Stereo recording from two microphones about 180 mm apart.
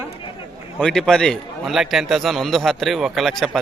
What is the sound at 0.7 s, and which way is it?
A man's voice, 5° left (ahead or behind).